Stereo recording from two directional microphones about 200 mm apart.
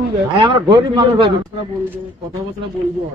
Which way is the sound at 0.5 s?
25° right (ahead or behind).